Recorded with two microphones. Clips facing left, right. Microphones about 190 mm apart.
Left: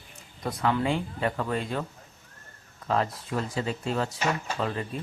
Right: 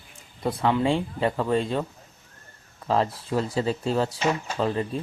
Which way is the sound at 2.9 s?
30° right (ahead or behind).